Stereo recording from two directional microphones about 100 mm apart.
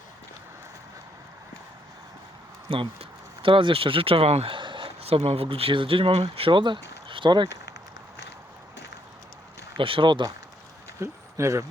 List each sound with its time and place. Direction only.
2.6 s speech: 65° right (ahead or behind)
9.7 s speech: 60° right (ahead or behind)
11.0 s a sound: 30° right (ahead or behind)